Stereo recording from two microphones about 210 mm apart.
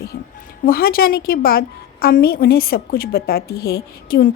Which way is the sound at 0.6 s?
45° left (ahead or behind).